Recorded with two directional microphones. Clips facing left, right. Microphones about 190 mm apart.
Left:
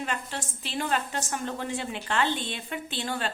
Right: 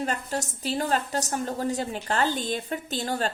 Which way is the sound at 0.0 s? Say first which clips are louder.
Right 4 dB; 40° right (ahead or behind).